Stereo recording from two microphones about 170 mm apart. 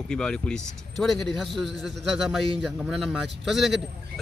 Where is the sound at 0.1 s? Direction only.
5° left (ahead or behind).